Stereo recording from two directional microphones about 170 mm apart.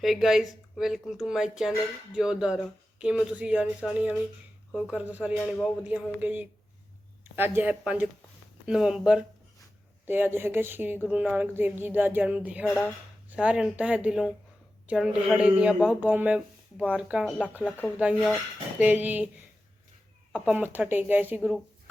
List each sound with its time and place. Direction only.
0.0 s speech: centre (ahead or behind)
17.6 s speech: 10° left (ahead or behind)
18.0 s speech: centre (ahead or behind)
20.3 s speech: 10° right (ahead or behind)